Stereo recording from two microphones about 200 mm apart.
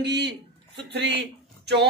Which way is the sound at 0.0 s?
55° right (ahead or behind).